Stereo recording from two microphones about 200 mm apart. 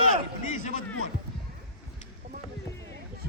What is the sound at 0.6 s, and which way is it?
Speech, 40° left (ahead or behind).